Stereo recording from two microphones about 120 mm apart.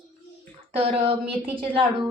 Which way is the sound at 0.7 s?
55° right (ahead or behind).